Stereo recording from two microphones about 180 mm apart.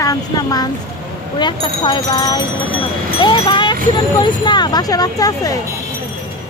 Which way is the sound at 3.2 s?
25° left (ahead or behind).